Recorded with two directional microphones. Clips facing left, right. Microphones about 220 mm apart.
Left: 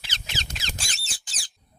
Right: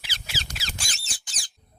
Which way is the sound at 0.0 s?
10° right (ahead or behind).